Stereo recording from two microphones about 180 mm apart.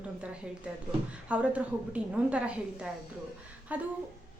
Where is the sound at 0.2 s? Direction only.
5° right (ahead or behind).